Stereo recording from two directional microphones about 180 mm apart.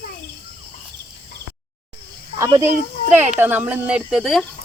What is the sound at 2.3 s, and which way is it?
Speech, 15° right (ahead or behind).